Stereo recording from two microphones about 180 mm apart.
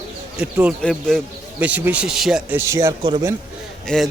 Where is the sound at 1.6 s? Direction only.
10° right (ahead or behind).